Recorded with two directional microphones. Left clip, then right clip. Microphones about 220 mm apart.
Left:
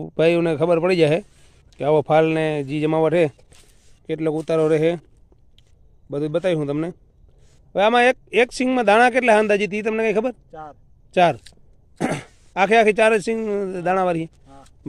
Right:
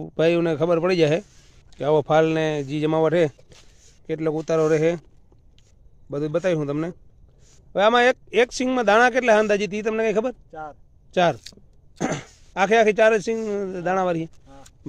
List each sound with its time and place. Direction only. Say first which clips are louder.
0.0 s a man's voice: left 2 dB; 20° left (ahead or behind)
10.5 s speech: right 1 dB; centre (ahead or behind)
11.1 s speech: left 3 dB; 20° left (ahead or behind)